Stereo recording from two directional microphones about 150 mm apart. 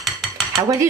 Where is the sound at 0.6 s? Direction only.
25° right (ahead or behind).